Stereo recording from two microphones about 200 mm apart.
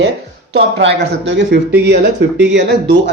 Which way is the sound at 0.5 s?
65° right (ahead or behind).